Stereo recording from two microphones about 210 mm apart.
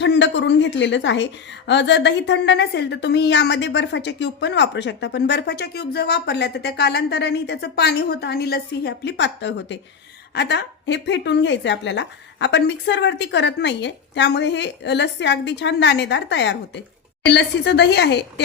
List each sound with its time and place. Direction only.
0.0 s a woman's voice: 60° left (ahead or behind)